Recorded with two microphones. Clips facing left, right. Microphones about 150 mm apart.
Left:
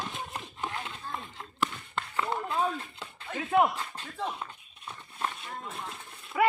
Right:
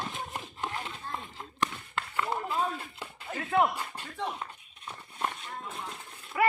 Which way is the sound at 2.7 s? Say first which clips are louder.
Left 1 dB; 10° right (ahead or behind).